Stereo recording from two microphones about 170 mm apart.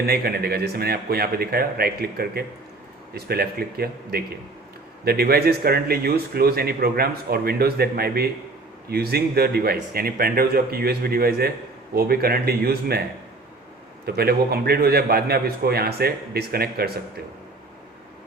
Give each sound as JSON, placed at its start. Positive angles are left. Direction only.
{"t": 0.0, "sound": "speech", "side_deg": -65}